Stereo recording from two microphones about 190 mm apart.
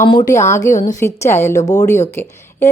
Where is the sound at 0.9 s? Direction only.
15° left (ahead or behind).